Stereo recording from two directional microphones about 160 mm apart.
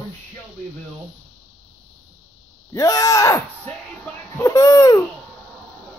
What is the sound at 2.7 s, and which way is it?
Speech, 20° left (ahead or behind).